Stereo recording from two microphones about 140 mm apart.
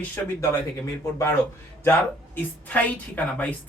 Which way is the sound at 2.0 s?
10° left (ahead or behind).